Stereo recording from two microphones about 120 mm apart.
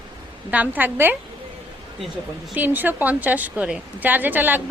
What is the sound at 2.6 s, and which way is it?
A woman's voice, 15° right (ahead or behind).